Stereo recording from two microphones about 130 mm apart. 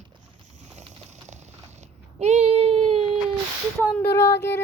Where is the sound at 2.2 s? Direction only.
60° right (ahead or behind).